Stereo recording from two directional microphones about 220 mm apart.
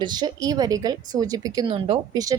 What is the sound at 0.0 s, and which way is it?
A woman's voice, 20° right (ahead or behind).